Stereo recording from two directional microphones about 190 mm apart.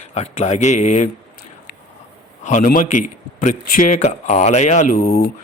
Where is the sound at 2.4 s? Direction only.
40° left (ahead or behind).